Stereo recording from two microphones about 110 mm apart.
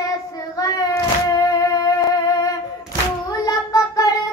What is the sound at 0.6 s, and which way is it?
Music, 30° left (ahead or behind).